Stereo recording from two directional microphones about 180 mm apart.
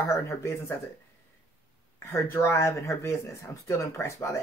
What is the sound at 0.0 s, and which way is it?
Speech, 15° left (ahead or behind).